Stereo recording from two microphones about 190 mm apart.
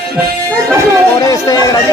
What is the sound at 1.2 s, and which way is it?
Speech, 20° left (ahead or behind).